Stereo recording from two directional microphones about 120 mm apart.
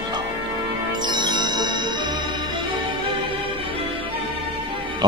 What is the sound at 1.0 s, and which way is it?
Music, 40° right (ahead or behind).